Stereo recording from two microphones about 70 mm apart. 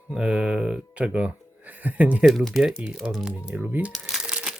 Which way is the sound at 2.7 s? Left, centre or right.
Centre.